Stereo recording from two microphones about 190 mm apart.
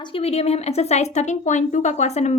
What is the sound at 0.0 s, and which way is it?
A woman's voice, 30° left (ahead or behind).